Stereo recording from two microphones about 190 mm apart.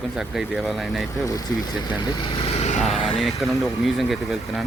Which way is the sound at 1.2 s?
20° left (ahead or behind).